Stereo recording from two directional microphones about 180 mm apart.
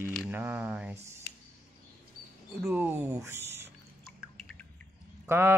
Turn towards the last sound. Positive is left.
turn(degrees=-15)  # may be behind; listen again after turning